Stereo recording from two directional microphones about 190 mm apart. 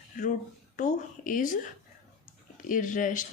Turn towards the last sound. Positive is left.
turn(degrees=45)  # may be behind; listen again after turning